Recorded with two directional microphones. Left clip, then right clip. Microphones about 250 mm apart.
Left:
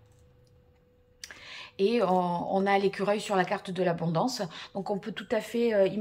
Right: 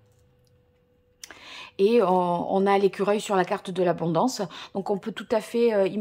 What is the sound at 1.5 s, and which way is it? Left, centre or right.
Speech, right.